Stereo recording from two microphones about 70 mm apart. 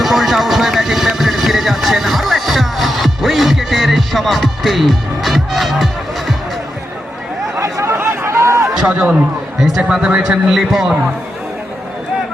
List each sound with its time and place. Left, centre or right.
0.0 s vehicle: centre
7.6 s a sound: right
7.9 s chatter: right
8.3 s a sound: right
8.9 s speech: centre
9.6 s speech: centre
10.5 s a man's voice: centre